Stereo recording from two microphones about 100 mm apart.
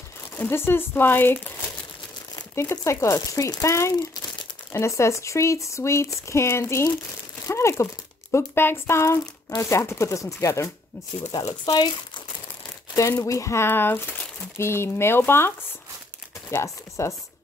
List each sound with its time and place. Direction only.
0.4 s speech: 25° left (ahead or behind)
2.5 s speech: 30° left (ahead or behind)
11.3 s speech: 40° left (ahead or behind)
12.9 s speech: 30° left (ahead or behind)